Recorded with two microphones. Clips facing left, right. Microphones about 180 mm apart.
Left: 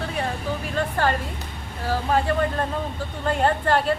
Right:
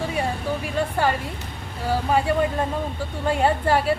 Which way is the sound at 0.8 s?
10° right (ahead or behind).